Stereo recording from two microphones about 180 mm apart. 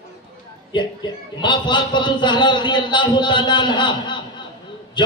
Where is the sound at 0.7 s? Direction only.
25° left (ahead or behind).